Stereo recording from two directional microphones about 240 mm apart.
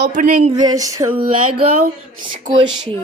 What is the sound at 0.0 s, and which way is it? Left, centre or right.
Speech, right.